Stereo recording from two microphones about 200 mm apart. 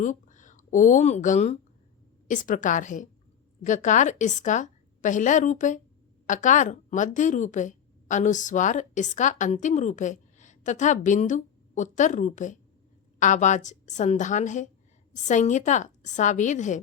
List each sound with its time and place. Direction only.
0.0 s a woman's voice: 40° left (ahead or behind)